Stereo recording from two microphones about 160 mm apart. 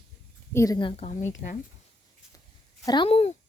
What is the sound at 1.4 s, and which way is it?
Speech, 45° left (ahead or behind).